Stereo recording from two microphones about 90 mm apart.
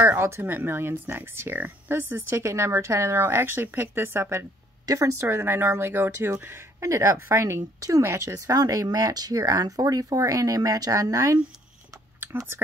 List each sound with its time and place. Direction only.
0.0 s speech: 25° right (ahead or behind)